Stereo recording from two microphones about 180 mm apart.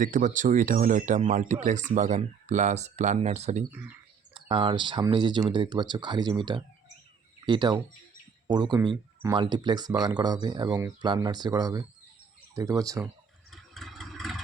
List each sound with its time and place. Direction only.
0.0 s speech: 45° right (ahead or behind)
3.7 s speech: 10° right (ahead or behind)
4.4 s speech: 30° right (ahead or behind)
13.5 s vehicle: centre (ahead or behind)